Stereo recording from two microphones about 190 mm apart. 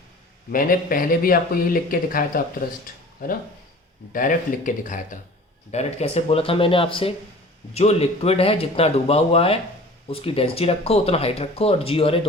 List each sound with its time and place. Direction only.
0.5 s speech: 50° left (ahead or behind)
2.8 s a sound: 45° left (ahead or behind)
4.1 s speech: 45° left (ahead or behind); by 12.2 s 30° left (ahead or behind)